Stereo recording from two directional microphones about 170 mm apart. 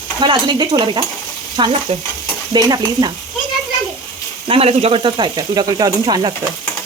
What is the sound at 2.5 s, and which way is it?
Speech, 25° right (ahead or behind).